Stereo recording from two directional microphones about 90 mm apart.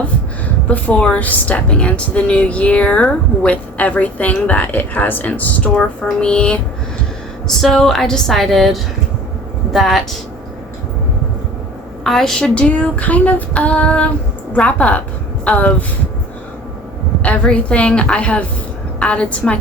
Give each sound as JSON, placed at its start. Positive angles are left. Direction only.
{"t": 0.7, "sound": "a woman's voice", "side_deg": 15}
{"t": 12.0, "sound": "a woman's voice", "side_deg": 5}
{"t": 17.2, "sound": "a woman's voice", "side_deg": 15}